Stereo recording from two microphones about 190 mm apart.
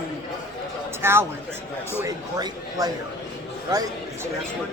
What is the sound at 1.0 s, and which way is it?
A man's voice, 10° right (ahead or behind).